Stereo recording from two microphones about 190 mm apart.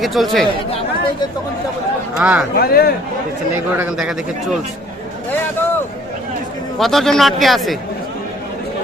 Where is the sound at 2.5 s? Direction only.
55° left (ahead or behind).